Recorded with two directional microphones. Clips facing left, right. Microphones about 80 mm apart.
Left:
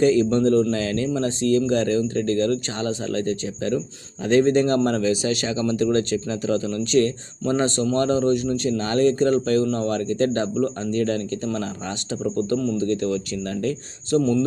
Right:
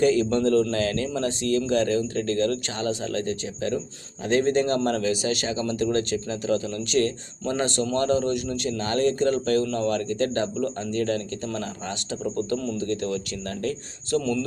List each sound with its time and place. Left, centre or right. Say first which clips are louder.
0.0 s speech: left 3 dB; left
13.5 s speech: left 3 dB; right
14.1 s speech: left 5 dB; left